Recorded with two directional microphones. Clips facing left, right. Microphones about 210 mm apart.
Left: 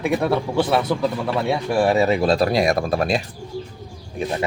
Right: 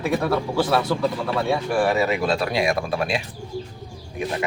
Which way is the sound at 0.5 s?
25° left (ahead or behind).